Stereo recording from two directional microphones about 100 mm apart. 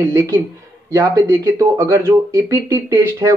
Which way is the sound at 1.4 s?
35° right (ahead or behind).